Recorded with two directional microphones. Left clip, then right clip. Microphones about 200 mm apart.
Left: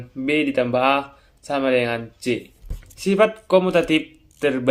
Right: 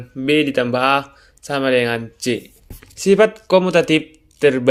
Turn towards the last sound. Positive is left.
turn(degrees=-35)  # may be behind; listen again after turning